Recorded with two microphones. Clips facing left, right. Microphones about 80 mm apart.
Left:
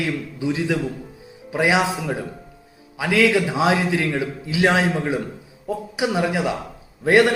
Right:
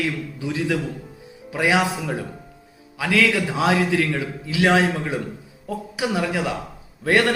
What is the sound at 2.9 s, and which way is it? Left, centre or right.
A man's voice, centre.